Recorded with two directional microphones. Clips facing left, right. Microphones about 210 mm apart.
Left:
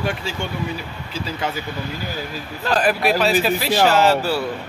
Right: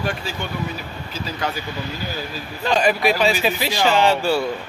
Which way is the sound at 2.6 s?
5° left (ahead or behind).